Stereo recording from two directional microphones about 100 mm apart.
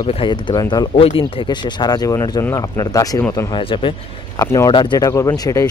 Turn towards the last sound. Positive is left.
turn(degrees=35)  # may be behind; listen again after turning